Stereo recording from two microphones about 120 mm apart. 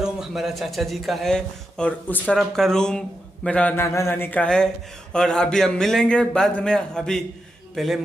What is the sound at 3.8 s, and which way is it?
A man's voice, 25° left (ahead or behind).